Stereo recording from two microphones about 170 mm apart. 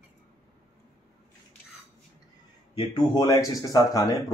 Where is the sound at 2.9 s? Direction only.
25° left (ahead or behind).